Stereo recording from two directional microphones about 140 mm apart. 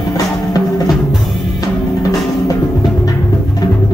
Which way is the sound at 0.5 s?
25° left (ahead or behind).